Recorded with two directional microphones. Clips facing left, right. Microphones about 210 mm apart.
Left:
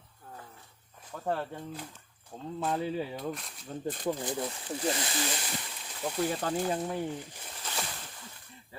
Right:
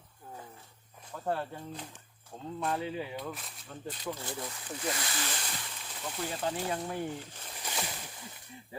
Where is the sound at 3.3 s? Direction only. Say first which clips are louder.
Left 4 dB; centre (ahead or behind).